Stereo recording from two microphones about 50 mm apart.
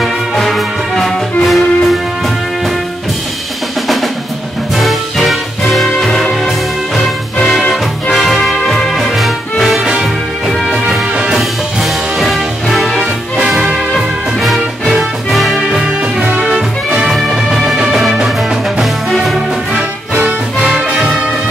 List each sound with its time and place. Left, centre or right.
0.0 s music: centre
4.7 s music: centre
7.7 s music: centre
11.3 s music: centre
15.5 s music: centre
17.1 s music: centre
19.7 s music: right